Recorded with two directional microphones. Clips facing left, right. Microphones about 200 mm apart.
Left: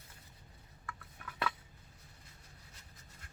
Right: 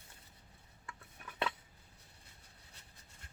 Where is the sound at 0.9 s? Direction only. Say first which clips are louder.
Left 3 dB; 25° right (ahead or behind).